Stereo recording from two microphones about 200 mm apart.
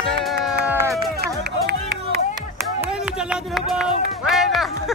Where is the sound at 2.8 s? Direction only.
5° right (ahead or behind).